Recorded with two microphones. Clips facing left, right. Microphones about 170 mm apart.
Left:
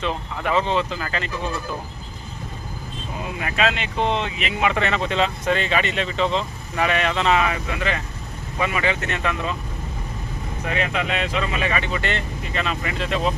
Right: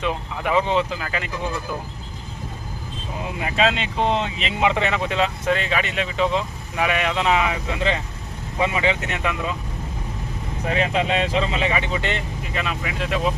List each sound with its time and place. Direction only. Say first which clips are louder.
0.0 s speech: right 1 dB; 10° right (ahead or behind)
3.4 s speech: right 2 dB; 25° right (ahead or behind)
10.7 s speech: right 3 dB; 30° right (ahead or behind)
12.5 s speech: left 1 dB; 5° right (ahead or behind)